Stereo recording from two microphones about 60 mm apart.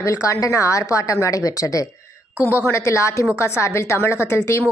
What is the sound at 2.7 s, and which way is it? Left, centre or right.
A woman's voice, left.